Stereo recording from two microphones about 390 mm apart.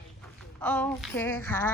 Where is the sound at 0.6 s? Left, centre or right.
Centre.